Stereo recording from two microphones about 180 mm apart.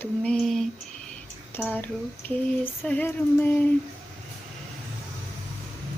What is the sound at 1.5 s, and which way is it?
Speech, 10° left (ahead or behind).